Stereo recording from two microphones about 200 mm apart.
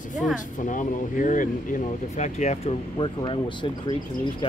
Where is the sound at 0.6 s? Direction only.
40° left (ahead or behind).